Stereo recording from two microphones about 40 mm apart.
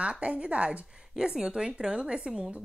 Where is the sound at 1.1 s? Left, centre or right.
Centre.